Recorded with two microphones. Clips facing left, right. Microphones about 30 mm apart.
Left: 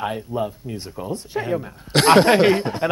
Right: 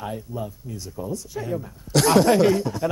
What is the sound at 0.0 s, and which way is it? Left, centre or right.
Speech, left.